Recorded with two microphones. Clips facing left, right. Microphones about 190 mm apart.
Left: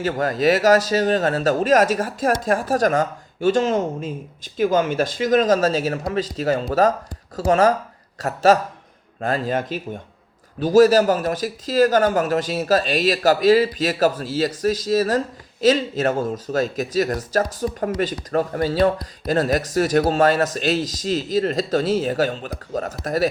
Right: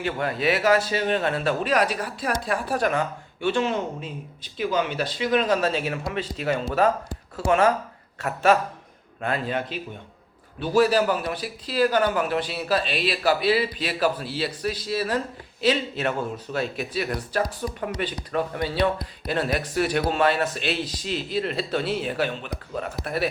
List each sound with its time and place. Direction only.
0.0 s a man's voice: 40° left (ahead or behind)